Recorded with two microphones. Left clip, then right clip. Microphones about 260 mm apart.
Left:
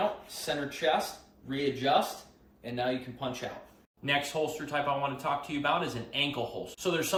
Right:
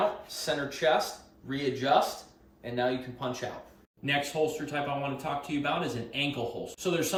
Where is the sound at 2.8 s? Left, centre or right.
Right.